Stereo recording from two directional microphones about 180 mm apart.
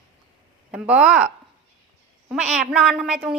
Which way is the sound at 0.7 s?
5° right (ahead or behind).